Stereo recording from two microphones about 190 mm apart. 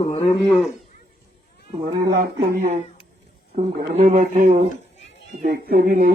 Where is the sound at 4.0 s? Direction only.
35° right (ahead or behind).